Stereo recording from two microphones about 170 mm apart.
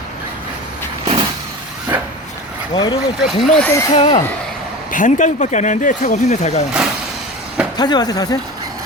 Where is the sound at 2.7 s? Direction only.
25° left (ahead or behind).